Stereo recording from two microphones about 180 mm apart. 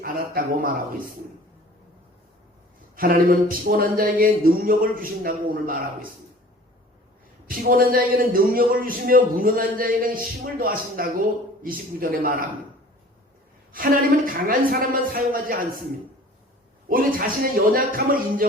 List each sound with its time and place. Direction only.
0.0 s a man's voice: 50° right (ahead or behind)
2.9 s a man's voice: 55° right (ahead or behind)
7.4 s a man's voice: 55° right (ahead or behind)
13.7 s a man's voice: 50° right (ahead or behind)
16.9 s a man's voice: 50° right (ahead or behind)